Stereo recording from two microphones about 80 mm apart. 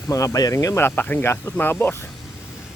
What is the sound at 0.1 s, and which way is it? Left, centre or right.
Speech, left.